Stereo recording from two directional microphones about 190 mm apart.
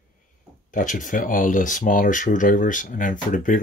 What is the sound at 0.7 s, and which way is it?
Speech, 45° left (ahead or behind).